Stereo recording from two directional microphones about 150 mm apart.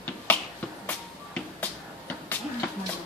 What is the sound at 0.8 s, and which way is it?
Music, 10° left (ahead or behind).